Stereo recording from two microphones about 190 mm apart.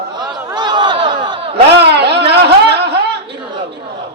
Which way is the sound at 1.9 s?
60° right (ahead or behind).